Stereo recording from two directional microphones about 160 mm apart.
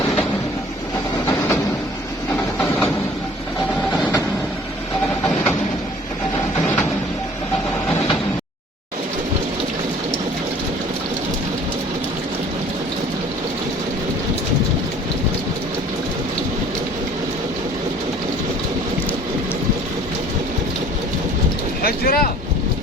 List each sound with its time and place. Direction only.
21.8 s boat: 70° left (ahead or behind)